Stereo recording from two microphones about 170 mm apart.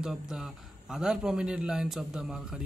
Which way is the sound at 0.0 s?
5° right (ahead or behind).